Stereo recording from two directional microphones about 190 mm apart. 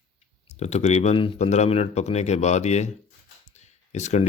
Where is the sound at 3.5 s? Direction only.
35° left (ahead or behind).